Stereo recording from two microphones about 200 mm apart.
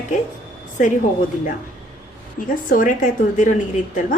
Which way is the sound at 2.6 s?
40° left (ahead or behind).